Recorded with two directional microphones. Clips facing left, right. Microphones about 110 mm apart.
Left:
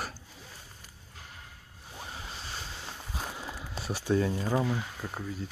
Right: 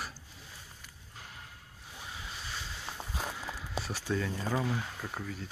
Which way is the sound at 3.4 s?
15° left (ahead or behind).